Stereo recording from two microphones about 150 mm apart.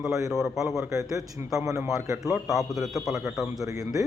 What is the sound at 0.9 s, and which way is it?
Speech, 20° right (ahead or behind).